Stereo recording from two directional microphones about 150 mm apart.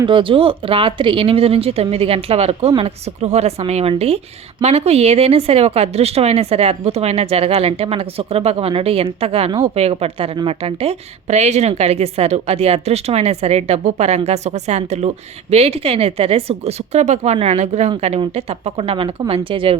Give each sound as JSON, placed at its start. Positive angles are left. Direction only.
{"t": 0.0, "sound": "speech", "side_deg": -35}